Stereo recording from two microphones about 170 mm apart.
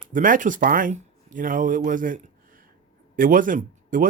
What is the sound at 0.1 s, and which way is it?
Speech, 50° right (ahead or behind).